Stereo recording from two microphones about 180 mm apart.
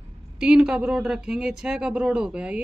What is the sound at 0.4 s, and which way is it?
A woman's voice, 5° right (ahead or behind).